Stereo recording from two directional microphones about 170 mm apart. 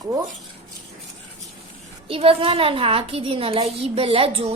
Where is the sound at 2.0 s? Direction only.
35° right (ahead or behind).